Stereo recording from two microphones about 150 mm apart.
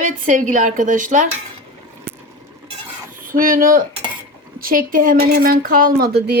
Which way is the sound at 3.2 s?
70° right (ahead or behind).